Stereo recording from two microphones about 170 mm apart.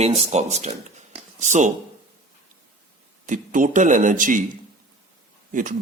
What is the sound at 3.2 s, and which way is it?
A man's voice, 50° right (ahead or behind).